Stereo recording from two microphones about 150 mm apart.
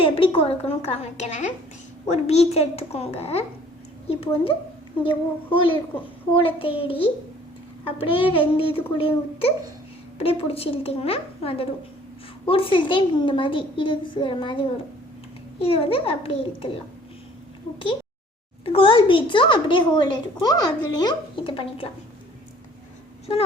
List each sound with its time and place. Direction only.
0.0 s a woman's voice: 35° left (ahead or behind)
18.6 s speech: 35° left (ahead or behind)